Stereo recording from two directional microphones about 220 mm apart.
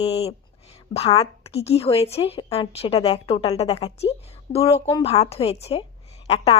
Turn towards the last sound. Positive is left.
turn(degrees=30)  # may be behind; listen again after turning